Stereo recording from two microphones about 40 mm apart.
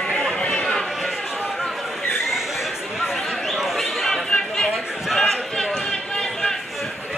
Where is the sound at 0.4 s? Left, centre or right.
Left.